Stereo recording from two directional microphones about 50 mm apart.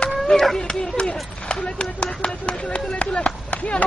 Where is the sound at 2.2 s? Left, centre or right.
Left.